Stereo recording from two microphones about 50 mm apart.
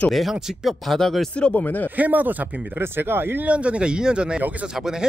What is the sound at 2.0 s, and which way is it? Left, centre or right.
Speech, right.